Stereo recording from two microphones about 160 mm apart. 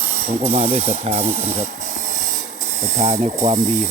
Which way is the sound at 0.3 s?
40° right (ahead or behind).